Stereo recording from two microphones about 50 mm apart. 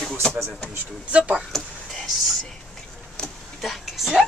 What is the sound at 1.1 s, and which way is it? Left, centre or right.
Chuckle, centre.